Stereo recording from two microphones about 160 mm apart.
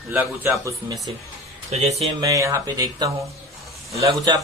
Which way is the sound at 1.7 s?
40° right (ahead or behind).